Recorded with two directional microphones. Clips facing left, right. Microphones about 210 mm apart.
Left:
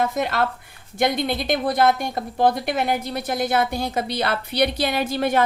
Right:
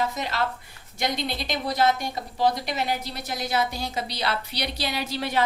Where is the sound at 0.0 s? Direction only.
55° left (ahead or behind).